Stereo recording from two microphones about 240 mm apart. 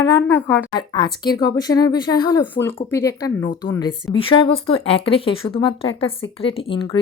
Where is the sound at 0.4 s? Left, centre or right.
Centre.